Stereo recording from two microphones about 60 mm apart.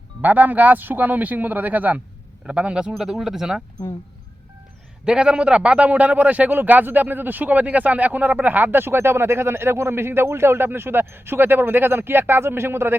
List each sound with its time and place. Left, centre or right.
0.2 s a man's voice: right; by 3.6 s centre
5.0 s a man's voice: centre; by 13.0 s right